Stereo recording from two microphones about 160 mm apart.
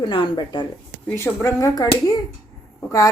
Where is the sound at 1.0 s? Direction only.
15° left (ahead or behind).